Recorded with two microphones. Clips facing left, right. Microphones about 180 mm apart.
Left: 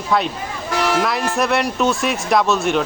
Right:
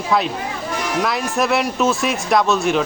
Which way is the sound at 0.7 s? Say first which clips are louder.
Left 5 dB; 80° left.